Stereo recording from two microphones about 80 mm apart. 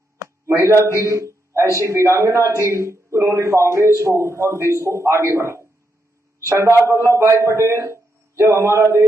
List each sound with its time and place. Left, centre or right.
0.5 s a man's voice: right